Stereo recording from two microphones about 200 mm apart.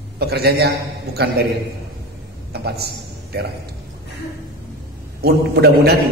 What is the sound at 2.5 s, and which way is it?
Speech, 55° right (ahead or behind).